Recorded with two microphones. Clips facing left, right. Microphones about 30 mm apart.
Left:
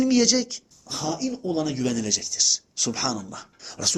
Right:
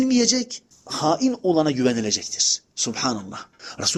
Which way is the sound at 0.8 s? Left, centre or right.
Right.